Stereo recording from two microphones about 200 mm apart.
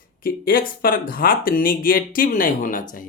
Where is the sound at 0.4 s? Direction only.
45° left (ahead or behind).